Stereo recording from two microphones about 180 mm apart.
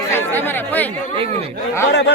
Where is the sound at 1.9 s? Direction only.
70° left (ahead or behind).